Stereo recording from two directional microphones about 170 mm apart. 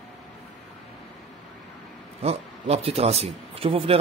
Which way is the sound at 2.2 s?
35° right (ahead or behind).